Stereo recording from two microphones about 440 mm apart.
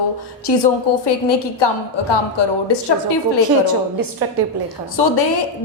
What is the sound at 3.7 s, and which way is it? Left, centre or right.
Speech, right.